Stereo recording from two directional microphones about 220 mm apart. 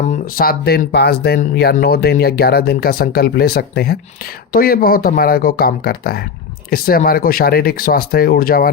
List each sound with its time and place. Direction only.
0.1 s speech: 40° left (ahead or behind)